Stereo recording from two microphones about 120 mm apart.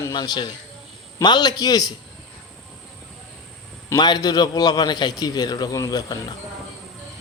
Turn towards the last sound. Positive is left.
turn(degrees=30)  # may be behind; listen again after turning